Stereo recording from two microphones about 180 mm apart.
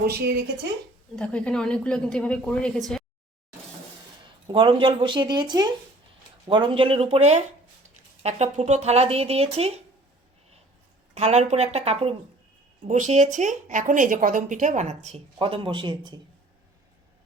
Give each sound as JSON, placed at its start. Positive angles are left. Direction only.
{"t": 0.0, "sound": "speech", "side_deg": -60}
{"t": 1.1, "sound": "a woman's voice", "side_deg": 5}
{"t": 4.4, "sound": "a woman's voice", "side_deg": -25}
{"t": 11.1, "sound": "a woman's voice", "side_deg": -40}